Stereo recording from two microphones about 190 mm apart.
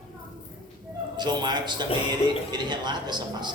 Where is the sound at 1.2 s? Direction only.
20° right (ahead or behind).